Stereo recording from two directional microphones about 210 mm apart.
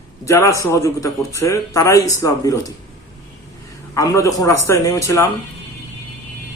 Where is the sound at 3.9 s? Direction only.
15° left (ahead or behind).